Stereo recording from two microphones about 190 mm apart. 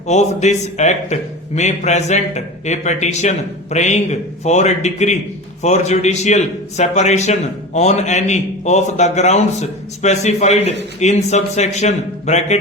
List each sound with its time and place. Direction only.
0.1 s a man's voice: 35° left (ahead or behind)